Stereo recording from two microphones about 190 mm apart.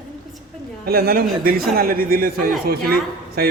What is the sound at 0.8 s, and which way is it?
A man's voice, 50° right (ahead or behind).